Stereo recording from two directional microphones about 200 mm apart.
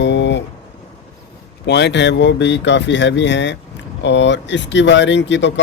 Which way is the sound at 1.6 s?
60° left (ahead or behind).